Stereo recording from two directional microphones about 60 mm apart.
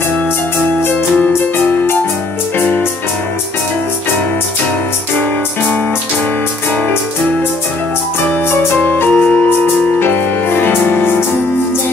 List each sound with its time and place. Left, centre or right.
8.7 s music: left